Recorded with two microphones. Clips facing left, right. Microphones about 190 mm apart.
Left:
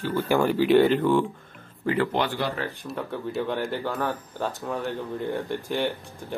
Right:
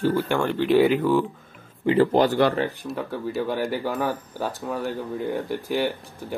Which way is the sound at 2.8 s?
5° right (ahead or behind).